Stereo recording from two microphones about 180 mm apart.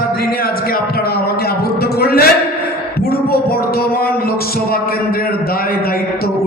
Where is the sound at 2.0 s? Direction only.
60° left (ahead or behind).